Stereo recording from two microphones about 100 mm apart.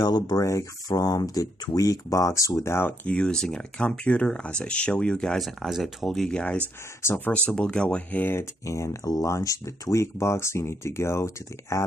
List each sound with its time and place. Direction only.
0.0 s speech: 45° left (ahead or behind); by 2.9 s 25° left (ahead or behind)
3.1 s speech: 10° left (ahead or behind)
7.0 s speech: 25° left (ahead or behind)
7.3 s speech: 10° left (ahead or behind)
8.4 s speech: 30° left (ahead or behind)